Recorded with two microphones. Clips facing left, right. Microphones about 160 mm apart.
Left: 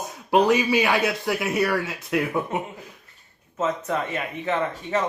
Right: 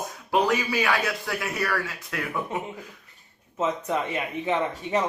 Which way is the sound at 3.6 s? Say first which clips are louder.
Left 1 dB; 15° right (ahead or behind).